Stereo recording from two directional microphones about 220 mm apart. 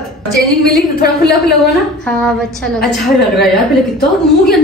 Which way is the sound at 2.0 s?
5° left (ahead or behind).